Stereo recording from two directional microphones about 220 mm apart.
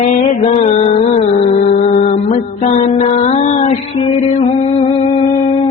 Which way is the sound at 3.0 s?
30° left (ahead or behind).